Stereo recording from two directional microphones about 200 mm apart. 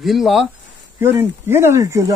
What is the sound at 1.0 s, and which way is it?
Speech, 10° right (ahead or behind).